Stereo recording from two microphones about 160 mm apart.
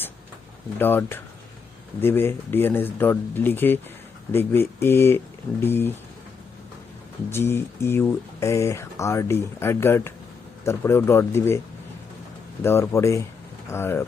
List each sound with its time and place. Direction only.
0.8 s speech: 15° left (ahead or behind)
7.3 s speech: 15° left (ahead or behind)
12.6 s speech: 15° left (ahead or behind)